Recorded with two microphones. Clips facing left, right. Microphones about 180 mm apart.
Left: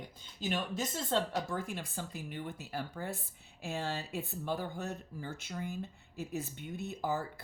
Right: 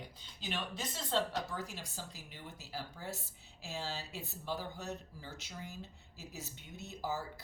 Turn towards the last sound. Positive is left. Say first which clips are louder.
# left 5 dB
turn(degrees=55)  # may be behind; listen again after turning